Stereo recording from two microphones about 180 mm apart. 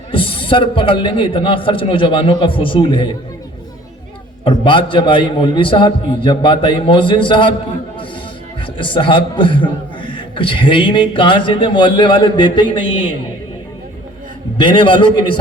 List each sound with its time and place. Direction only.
0.1 s a man's voice: 30° left (ahead or behind)
4.4 s a man's voice: 25° left (ahead or behind)
8.8 s a man's voice: 25° left (ahead or behind)
14.6 s a man's voice: 25° left (ahead or behind)